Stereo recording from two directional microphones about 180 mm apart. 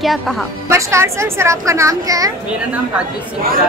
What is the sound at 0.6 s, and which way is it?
A woman's voice, 15° right (ahead or behind).